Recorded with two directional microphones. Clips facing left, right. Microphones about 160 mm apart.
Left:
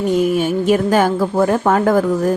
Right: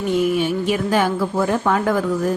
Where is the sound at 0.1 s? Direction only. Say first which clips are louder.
Left 1 dB; 45° left (ahead or behind).